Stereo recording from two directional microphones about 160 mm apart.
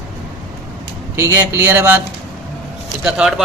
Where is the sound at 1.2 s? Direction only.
15° right (ahead or behind).